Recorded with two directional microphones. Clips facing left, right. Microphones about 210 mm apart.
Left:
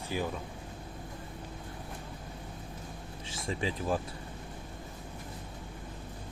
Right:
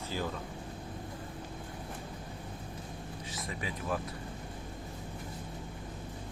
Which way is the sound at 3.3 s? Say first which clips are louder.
Left 7 dB; 30° left (ahead or behind).